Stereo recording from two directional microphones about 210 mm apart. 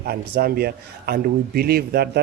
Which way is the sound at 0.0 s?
45° right (ahead or behind).